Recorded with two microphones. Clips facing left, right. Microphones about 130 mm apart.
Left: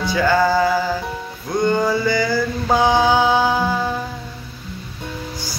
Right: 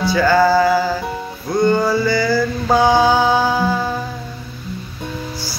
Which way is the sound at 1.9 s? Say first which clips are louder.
Right 2 dB; 15° left (ahead or behind).